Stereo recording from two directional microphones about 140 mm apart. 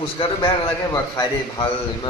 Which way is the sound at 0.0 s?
35° left (ahead or behind).